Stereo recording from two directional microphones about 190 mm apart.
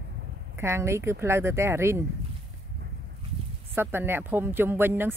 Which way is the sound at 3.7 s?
10° right (ahead or behind).